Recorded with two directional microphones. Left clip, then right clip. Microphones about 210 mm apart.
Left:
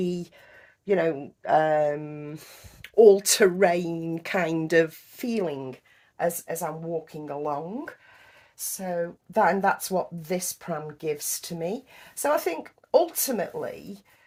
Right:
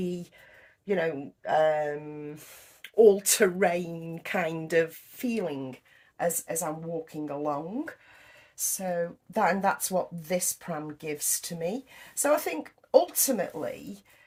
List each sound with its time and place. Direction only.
0.9 s speech: 50° left (ahead or behind); by 13.7 s 30° left (ahead or behind)